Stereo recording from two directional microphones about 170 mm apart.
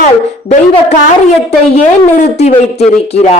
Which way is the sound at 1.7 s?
45° left (ahead or behind).